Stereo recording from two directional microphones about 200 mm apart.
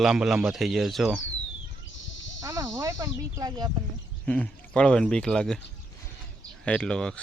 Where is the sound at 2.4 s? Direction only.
15° right (ahead or behind).